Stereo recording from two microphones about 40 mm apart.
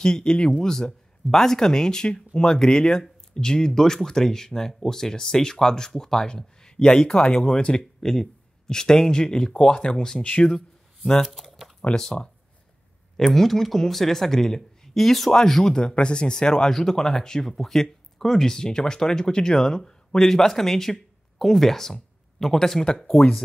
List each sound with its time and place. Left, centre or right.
0.0 s speech: centre
10.2 s speech: left
11.2 s typing: centre
11.9 s speech: centre
13.2 s speech: centre